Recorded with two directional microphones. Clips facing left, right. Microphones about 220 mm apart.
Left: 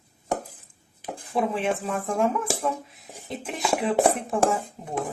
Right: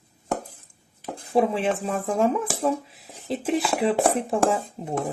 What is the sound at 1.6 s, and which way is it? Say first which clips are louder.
Speech: right 2 dB; 30° right (ahead or behind).